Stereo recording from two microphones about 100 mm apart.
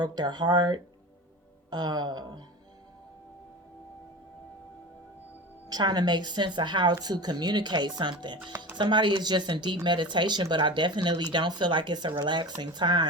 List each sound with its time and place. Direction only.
0.0 s speech: 45° right (ahead or behind)
5.6 s speech: 45° right (ahead or behind)
8.5 s speech: 15° right (ahead or behind)
8.8 s speech: 50° right (ahead or behind)